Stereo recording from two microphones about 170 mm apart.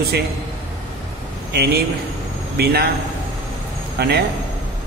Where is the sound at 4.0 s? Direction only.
75° right (ahead or behind).